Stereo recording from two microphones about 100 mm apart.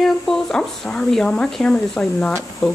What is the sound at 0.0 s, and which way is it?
Speech, 5° left (ahead or behind).